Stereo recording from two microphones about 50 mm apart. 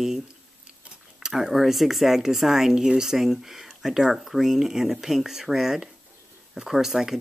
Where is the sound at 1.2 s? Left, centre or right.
Centre.